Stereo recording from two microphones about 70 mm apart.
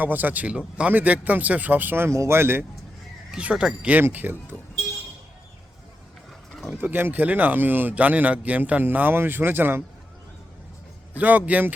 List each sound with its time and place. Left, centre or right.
0.0 s a man's voice: right
2.0 s speech: right
3.3 s speech: centre
4.1 s a man's voice: right
6.7 s a man's voice: right
11.1 s a man's voice: right